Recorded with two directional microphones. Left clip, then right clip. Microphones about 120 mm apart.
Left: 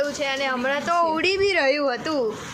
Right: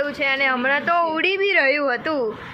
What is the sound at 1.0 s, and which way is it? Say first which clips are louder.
Speech: right 1 dB; 25° left (ahead or behind).